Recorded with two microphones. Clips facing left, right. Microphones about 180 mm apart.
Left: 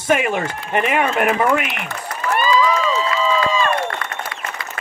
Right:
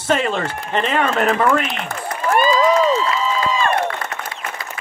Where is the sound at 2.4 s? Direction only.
45° right (ahead or behind).